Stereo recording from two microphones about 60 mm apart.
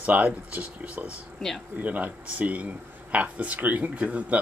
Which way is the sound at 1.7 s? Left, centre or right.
Right.